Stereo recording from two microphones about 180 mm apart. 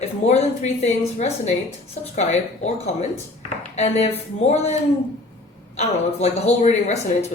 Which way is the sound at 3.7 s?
35° left (ahead or behind).